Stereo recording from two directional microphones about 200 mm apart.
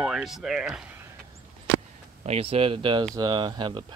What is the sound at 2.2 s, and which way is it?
Speech, 30° right (ahead or behind).